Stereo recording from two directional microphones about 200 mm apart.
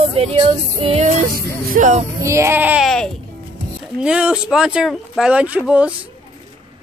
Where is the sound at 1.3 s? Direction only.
40° right (ahead or behind).